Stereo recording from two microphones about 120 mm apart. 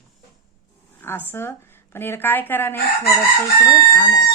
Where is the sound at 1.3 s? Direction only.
20° left (ahead or behind).